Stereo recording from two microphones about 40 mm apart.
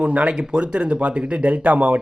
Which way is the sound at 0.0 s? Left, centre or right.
Right.